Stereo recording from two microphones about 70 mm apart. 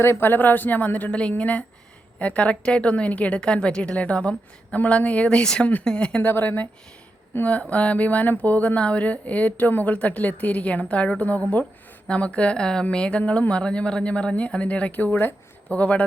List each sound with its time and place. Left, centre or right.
0.0 s a woman's voice: left; by 6.2 s centre
6.2 s a woman's voice: left